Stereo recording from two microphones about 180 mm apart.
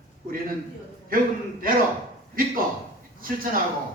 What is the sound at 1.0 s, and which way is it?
A man's voice, 50° right (ahead or behind).